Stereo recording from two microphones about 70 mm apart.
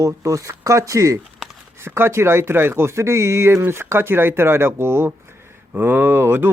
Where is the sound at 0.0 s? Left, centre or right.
Right.